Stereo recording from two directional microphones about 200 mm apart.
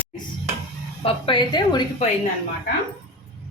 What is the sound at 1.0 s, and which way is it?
Speech, 25° left (ahead or behind).